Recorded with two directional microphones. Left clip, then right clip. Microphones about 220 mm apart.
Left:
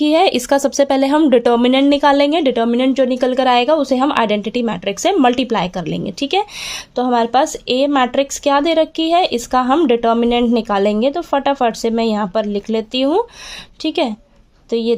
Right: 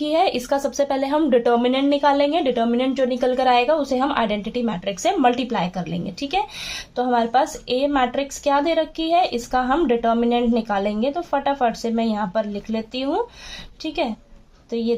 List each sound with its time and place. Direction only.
0.0 s speech: 45° left (ahead or behind)